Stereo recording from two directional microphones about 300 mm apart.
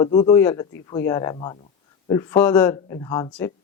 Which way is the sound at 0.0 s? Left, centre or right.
Centre.